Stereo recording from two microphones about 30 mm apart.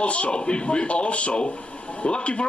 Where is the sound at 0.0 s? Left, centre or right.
Left.